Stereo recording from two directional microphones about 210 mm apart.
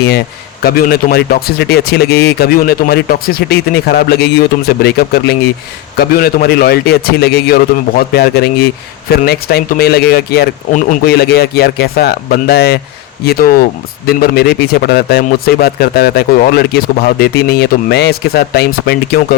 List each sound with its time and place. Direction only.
0.6 s a man's voice: 45° left (ahead or behind)